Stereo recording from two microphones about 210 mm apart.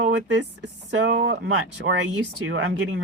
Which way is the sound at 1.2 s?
75° right (ahead or behind).